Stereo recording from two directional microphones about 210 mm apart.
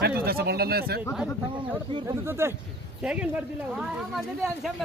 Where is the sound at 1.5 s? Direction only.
25° right (ahead or behind).